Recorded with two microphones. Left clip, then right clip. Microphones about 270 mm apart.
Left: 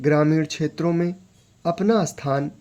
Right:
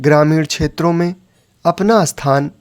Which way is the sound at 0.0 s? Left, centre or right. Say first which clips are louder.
Right 7 dB; right.